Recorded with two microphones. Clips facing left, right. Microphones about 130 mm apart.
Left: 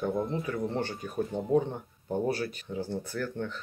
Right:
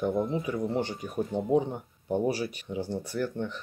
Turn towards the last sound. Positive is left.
turn(degrees=-15)  # may be behind; listen again after turning